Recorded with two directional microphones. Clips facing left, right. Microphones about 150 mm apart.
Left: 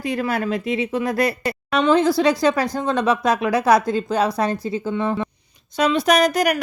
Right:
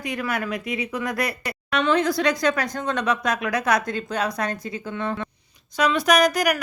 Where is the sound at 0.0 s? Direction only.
30° left (ahead or behind).